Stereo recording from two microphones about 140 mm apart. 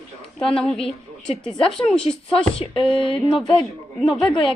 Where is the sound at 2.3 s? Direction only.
40° left (ahead or behind).